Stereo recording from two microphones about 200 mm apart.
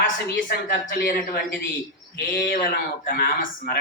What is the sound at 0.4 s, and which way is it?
Speech, 45° left (ahead or behind).